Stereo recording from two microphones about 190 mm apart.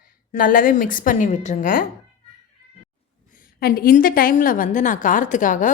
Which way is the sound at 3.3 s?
50° left (ahead or behind).